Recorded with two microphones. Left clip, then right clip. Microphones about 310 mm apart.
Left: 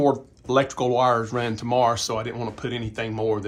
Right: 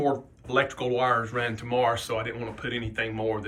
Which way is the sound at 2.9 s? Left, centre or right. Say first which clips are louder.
Left 3 dB; centre.